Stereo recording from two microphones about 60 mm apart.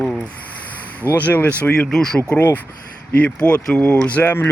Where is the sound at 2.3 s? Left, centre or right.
Left.